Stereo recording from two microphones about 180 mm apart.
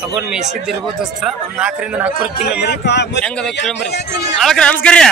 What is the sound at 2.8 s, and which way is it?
Speech, 70° left (ahead or behind).